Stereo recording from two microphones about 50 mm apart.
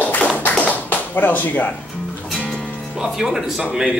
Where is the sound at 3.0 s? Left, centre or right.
Centre.